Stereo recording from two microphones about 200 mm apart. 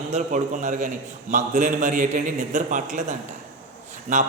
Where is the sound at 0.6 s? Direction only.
40° right (ahead or behind).